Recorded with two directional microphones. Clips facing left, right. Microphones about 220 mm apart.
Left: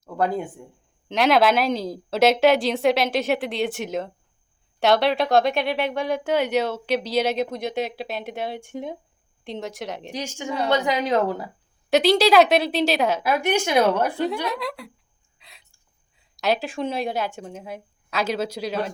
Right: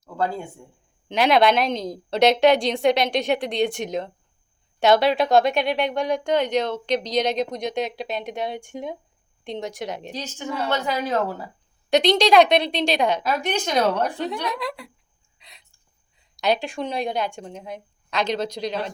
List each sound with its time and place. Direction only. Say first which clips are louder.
0.6 s a woman's voice: left 3 dB; 20° left (ahead or behind)
1.0 s speech: even; centre (ahead or behind)
10.1 s a woman's voice: left 1 dB; 10° left (ahead or behind)
11.9 s speech: left 1 dB; 5° left (ahead or behind)
15.4 s a sound: even; centre (ahead or behind)
16.1 s a woman's voice: right 1 dB; centre (ahead or behind)